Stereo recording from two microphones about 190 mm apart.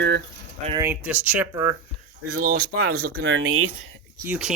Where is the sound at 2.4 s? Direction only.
55° right (ahead or behind).